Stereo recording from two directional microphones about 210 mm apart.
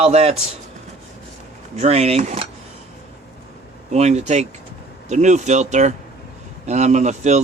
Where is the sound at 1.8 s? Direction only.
30° right (ahead or behind).